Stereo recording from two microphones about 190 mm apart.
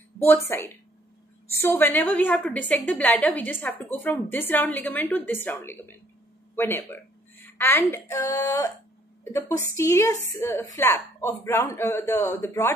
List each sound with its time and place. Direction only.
0.2 s a woman's voice: 10° left (ahead or behind)
9.8 s a woman's voice: 15° left (ahead or behind)